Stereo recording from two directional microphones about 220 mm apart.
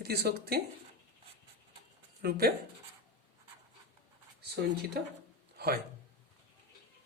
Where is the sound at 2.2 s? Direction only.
45° right (ahead or behind).